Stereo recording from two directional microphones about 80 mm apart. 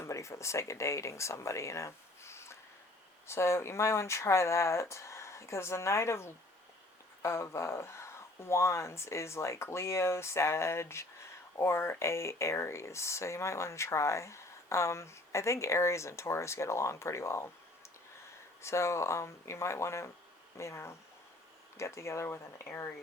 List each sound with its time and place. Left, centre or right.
0.0 s speech: left
18.6 s speech: left